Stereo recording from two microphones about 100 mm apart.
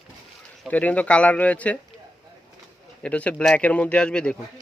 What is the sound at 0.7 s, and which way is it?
Speech, 15° left (ahead or behind).